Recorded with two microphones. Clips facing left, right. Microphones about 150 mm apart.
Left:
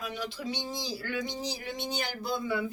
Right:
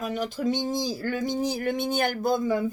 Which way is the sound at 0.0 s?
45° right (ahead or behind).